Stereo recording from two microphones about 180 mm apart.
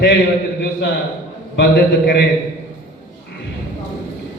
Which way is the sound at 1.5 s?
65° left (ahead or behind).